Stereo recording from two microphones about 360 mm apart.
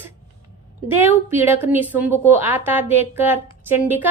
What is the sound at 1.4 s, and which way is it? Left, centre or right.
Speech, centre.